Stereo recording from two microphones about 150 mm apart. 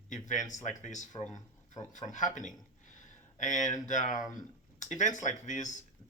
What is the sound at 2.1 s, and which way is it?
Speech, 55° left (ahead or behind).